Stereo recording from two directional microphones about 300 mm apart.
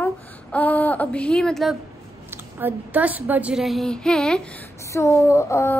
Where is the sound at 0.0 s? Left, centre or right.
Centre.